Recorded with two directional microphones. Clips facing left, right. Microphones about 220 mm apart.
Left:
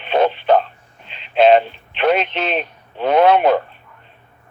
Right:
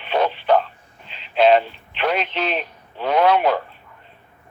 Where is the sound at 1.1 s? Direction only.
20° left (ahead or behind).